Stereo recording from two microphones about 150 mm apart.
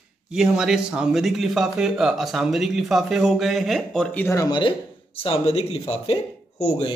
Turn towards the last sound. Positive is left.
turn(degrees=45)  # may be behind; listen again after turning